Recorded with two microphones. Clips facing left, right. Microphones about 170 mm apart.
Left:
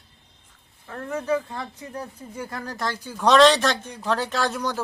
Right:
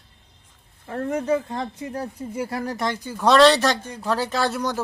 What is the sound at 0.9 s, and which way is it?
Speech, 35° right (ahead or behind).